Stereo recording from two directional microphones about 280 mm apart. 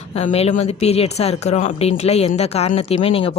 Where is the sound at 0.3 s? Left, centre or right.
Left.